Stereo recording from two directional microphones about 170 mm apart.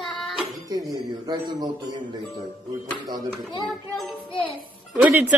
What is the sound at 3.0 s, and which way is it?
Speech, 25° right (ahead or behind).